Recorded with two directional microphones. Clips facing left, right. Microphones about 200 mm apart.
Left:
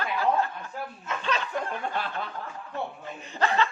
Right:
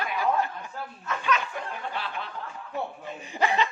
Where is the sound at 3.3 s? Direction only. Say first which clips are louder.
Even; 15° right (ahead or behind).